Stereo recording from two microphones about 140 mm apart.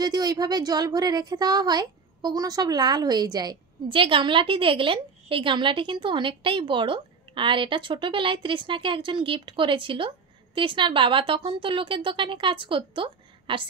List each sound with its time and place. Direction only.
0.0 s a woman's voice: 30° right (ahead or behind)